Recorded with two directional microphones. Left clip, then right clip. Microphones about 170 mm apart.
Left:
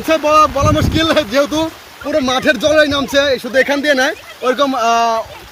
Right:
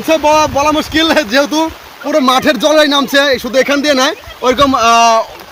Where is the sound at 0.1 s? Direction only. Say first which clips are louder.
Right 1 dB; 10° left (ahead or behind).